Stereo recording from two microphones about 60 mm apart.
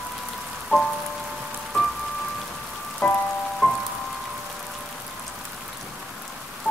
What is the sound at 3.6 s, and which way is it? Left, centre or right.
Music, centre.